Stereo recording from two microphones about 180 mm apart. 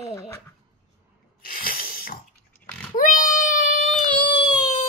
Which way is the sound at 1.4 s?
55° left (ahead or behind).